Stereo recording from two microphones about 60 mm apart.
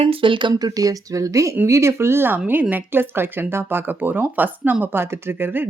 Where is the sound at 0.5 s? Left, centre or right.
Right.